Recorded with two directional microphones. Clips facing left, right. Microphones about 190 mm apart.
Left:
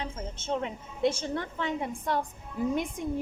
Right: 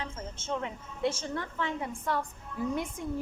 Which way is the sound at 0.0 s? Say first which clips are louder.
Left 3 dB; 20° left (ahead or behind).